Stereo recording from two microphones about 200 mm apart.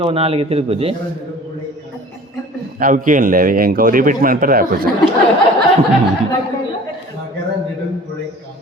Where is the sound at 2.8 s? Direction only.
45° right (ahead or behind).